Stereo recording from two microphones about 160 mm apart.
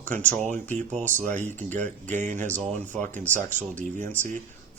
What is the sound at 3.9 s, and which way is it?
Speech, 50° right (ahead or behind).